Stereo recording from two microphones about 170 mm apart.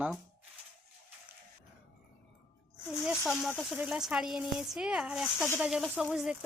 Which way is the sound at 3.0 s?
5° right (ahead or behind).